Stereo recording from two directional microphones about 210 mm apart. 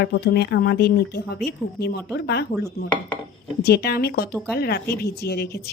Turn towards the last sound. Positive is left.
turn(degrees=50)  # may be behind; listen again after turning